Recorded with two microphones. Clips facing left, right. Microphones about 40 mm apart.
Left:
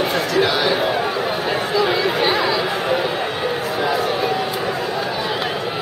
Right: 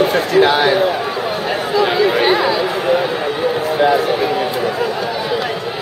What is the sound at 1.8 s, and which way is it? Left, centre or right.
Chatter, centre.